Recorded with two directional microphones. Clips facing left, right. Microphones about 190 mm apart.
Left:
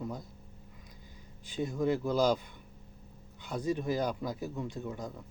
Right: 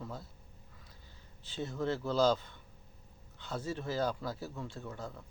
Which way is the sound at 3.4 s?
15° left (ahead or behind).